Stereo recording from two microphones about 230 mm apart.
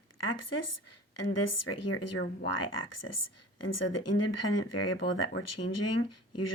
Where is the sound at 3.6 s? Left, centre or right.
Left.